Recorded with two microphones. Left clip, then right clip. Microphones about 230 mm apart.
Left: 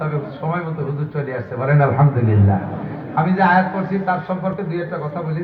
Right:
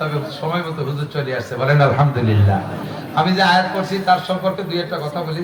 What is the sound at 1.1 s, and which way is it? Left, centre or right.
Speech, right.